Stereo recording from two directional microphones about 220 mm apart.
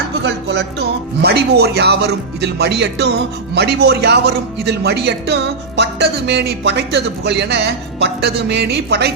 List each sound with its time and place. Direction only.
0.2 s music: 50° right (ahead or behind)
1.2 s speech: 50° right (ahead or behind)